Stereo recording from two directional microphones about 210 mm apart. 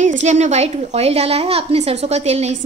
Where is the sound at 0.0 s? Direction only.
35° right (ahead or behind).